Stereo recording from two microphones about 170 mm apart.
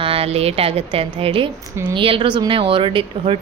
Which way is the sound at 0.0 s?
35° right (ahead or behind).